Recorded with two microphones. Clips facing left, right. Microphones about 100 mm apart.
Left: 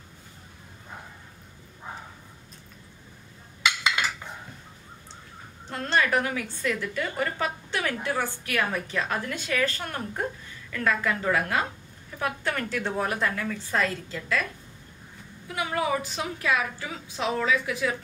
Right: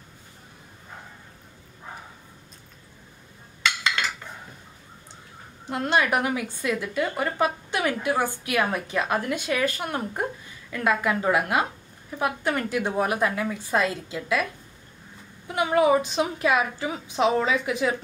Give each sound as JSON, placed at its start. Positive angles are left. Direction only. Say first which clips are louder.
{"t": 3.6, "sound": "dishes", "louder": "even", "side_deg": 10}
{"t": 5.7, "sound": "a woman's voice", "louder": "right 2 dB", "side_deg": -15}